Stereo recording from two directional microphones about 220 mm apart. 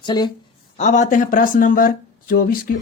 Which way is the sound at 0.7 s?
35° left (ahead or behind).